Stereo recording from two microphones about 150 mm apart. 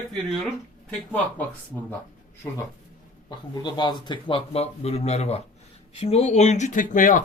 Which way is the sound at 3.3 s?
30° left (ahead or behind).